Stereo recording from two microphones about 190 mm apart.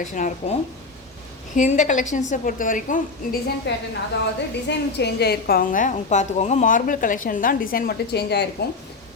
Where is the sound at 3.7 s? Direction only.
65° left (ahead or behind).